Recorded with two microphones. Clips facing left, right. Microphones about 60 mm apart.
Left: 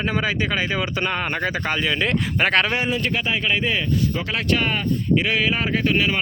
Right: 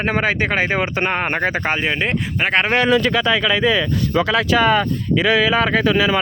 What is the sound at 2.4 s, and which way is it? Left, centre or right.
Speech, centre.